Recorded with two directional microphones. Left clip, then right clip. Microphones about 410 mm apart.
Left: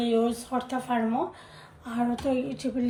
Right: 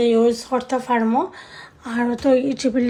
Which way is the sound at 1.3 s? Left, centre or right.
Centre.